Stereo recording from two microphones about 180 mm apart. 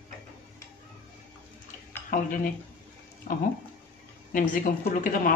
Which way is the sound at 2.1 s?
55° left (ahead or behind).